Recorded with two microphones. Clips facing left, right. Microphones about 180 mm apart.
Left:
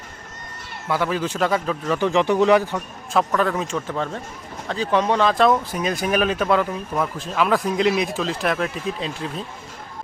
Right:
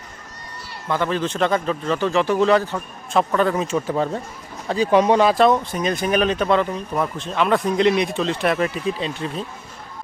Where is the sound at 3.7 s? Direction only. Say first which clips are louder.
Right 4 dB; 10° right (ahead or behind).